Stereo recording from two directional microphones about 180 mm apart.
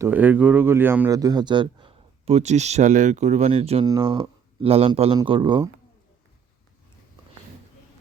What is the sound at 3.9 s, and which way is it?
Speech, 25° right (ahead or behind).